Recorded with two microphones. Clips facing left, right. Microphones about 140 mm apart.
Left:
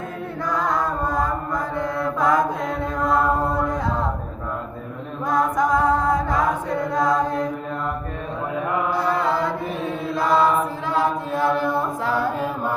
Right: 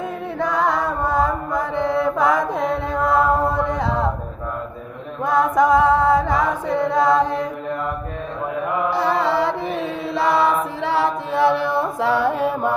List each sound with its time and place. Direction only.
0.3 s chant: 70° right (ahead or behind)
5.2 s chant: 70° right (ahead or behind)
8.9 s chant: 80° right